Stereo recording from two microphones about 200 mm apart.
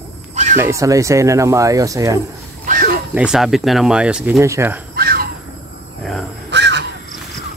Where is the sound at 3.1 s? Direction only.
5° right (ahead or behind).